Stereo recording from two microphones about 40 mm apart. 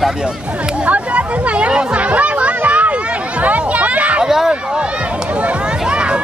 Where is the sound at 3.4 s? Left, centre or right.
Right.